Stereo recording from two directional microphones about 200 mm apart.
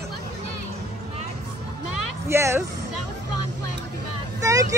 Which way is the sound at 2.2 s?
15° right (ahead or behind).